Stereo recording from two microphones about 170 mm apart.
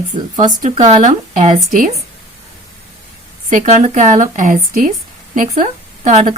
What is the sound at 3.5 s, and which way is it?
A woman's voice, 45° right (ahead or behind).